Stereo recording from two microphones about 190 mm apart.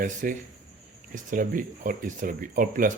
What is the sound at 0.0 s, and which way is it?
Speech, 45° right (ahead or behind).